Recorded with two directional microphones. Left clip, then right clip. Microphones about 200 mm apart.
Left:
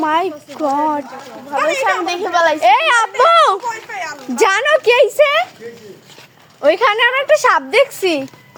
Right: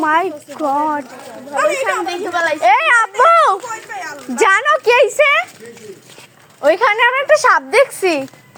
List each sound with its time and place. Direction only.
0.0 s speech: 10° left (ahead or behind)
1.8 s a woman's voice: 50° left (ahead or behind)
2.6 s speech: centre (ahead or behind)
3.9 s speech: 10° right (ahead or behind)
4.4 s speech: 10° left (ahead or behind)
6.6 s speech: 15° left (ahead or behind)